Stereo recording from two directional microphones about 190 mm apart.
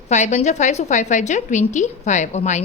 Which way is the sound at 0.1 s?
35° left (ahead or behind).